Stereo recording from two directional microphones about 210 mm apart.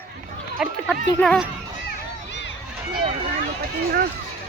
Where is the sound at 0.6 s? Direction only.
Centre (ahead or behind).